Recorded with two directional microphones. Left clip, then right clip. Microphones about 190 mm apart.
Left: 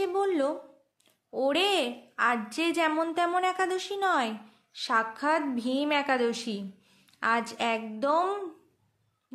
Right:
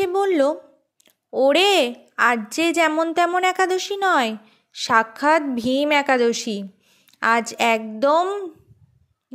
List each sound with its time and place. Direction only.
0.0 s a woman's voice: 40° right (ahead or behind)